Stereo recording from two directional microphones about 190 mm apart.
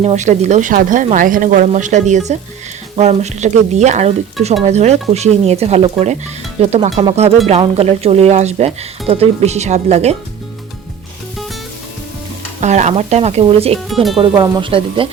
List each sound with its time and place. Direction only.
0.0 s speech: 35° right (ahead or behind)
12.5 s speech: 40° right (ahead or behind)
13.7 s speech: centre (ahead or behind)
14.2 s speech: 20° right (ahead or behind)